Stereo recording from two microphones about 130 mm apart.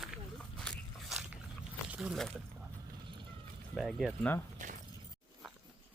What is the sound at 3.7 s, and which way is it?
Music, centre (ahead or behind).